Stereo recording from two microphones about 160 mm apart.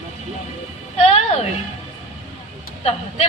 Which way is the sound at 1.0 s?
40° left (ahead or behind).